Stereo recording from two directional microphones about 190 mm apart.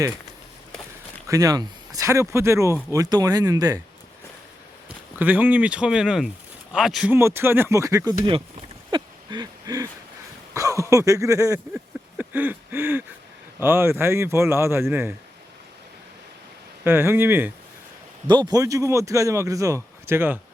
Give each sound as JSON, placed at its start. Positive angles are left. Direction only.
{"t": 1.3, "sound": "a man's voice", "side_deg": -20}
{"t": 5.2, "sound": "a man's voice", "side_deg": -10}
{"t": 8.9, "sound": "a sound", "side_deg": -20}
{"t": 10.5, "sound": "a man's voice", "side_deg": -15}
{"t": 11.7, "sound": "a sound", "side_deg": -10}
{"t": 13.6, "sound": "a man's voice", "side_deg": -10}
{"t": 16.8, "sound": "a man's voice", "side_deg": -10}
{"t": 18.3, "sound": "a man's voice", "side_deg": -20}